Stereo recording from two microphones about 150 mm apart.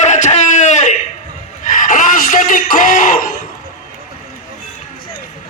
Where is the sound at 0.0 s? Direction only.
50° left (ahead or behind).